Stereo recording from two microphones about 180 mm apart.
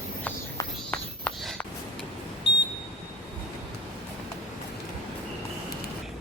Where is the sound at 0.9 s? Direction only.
5° left (ahead or behind).